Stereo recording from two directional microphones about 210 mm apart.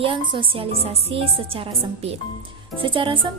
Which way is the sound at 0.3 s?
25° right (ahead or behind).